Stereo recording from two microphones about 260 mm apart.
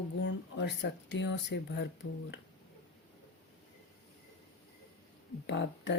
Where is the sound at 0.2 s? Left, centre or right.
Left.